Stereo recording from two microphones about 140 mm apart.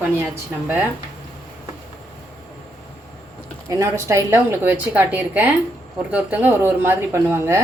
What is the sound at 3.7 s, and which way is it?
A woman's voice, 20° right (ahead or behind).